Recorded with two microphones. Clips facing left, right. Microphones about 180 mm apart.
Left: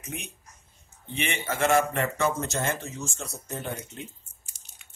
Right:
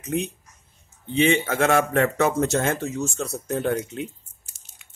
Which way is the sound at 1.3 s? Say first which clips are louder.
Left 1 dB; 70° right (ahead or behind).